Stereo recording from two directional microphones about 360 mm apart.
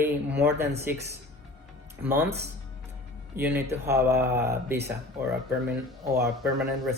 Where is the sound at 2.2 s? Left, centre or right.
Right.